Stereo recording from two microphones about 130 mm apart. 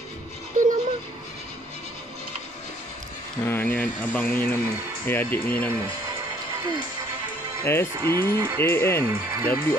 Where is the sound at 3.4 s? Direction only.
15° left (ahead or behind).